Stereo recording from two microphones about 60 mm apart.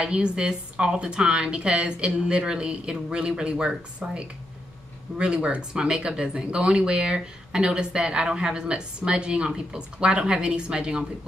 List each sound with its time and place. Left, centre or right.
0.0 s speech: centre